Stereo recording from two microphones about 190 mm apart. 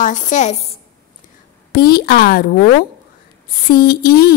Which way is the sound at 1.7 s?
55° left (ahead or behind).